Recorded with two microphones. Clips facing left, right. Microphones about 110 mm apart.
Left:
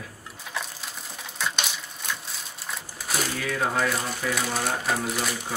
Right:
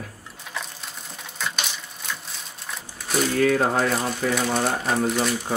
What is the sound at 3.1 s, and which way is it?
Typewriter, centre (ahead or behind).